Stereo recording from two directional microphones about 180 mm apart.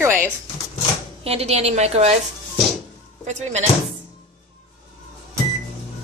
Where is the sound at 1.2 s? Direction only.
35° right (ahead or behind).